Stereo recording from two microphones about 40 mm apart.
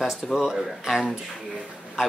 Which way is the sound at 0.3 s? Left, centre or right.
Centre.